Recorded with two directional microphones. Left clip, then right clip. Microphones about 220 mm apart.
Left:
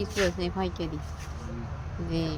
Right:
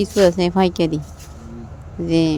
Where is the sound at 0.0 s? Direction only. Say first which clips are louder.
Right 13 dB; 35° right (ahead or behind).